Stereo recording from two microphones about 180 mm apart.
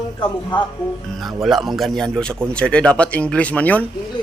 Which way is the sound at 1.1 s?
Centre (ahead or behind).